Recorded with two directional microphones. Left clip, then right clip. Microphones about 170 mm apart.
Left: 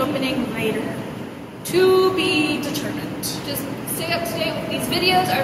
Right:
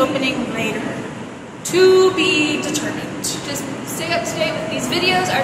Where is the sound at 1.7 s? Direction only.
20° right (ahead or behind).